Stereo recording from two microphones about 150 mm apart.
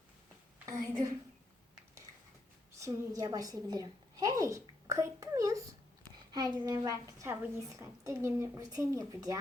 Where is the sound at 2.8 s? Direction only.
20° right (ahead or behind).